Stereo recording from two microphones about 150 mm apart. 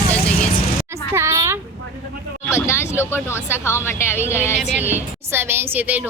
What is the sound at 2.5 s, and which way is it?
Vehicle, 15° left (ahead or behind).